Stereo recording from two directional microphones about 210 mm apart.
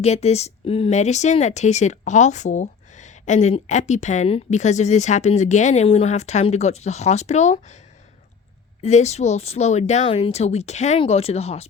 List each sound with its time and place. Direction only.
0.0 s speech: 30° left (ahead or behind)
8.8 s speech: 30° left (ahead or behind)